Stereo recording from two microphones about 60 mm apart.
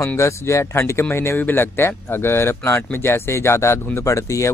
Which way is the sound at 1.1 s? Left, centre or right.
Left.